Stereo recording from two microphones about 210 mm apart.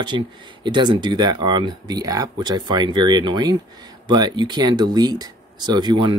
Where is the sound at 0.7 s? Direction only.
20° right (ahead or behind).